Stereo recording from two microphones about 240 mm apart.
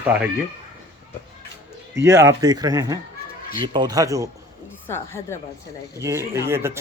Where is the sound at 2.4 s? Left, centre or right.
Centre.